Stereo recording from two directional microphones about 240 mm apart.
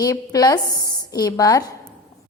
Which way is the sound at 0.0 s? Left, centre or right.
Centre.